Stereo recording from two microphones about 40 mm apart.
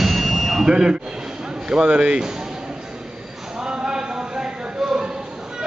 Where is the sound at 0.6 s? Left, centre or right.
Centre.